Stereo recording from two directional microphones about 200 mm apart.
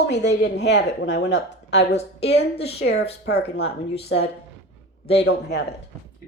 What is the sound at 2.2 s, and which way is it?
Speech, 30° left (ahead or behind).